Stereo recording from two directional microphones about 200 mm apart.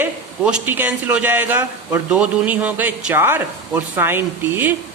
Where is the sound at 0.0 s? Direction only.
5° right (ahead or behind).